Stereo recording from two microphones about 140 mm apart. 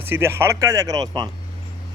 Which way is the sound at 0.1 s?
15° right (ahead or behind).